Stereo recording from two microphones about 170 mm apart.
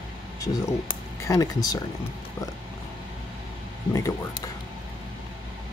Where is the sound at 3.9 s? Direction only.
20° left (ahead or behind).